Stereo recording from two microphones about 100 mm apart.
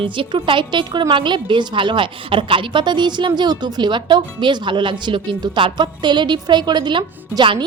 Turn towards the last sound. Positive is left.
turn(degrees=-55)  # may be behind; listen again after turning